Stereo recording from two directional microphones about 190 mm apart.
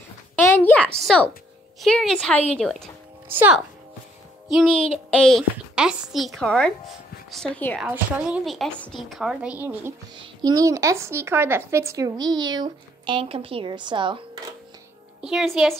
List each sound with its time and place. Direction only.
0.4 s a woman's voice: 10° left (ahead or behind)
3.3 s speech: 10° right (ahead or behind)
4.5 s a woman's voice: centre (ahead or behind)
7.8 s a woman's voice: 5° right (ahead or behind)
10.1 s speech: 25° right (ahead or behind)
15.2 s a woman's voice: centre (ahead or behind)